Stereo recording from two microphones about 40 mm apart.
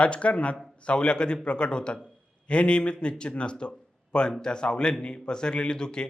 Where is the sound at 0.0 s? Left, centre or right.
Left.